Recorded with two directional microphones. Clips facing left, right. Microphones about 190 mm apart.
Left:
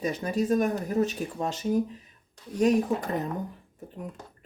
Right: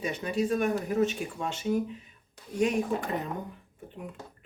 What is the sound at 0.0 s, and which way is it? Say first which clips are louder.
Speech: left 2 dB; 40° left (ahead or behind).